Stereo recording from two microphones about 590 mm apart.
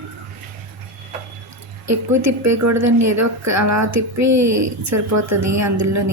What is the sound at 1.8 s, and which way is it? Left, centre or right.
A woman's voice, right.